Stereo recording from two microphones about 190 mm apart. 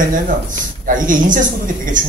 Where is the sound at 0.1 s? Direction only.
45° right (ahead or behind).